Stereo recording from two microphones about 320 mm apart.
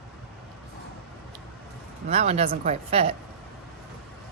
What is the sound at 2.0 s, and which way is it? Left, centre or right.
A woman's voice, centre.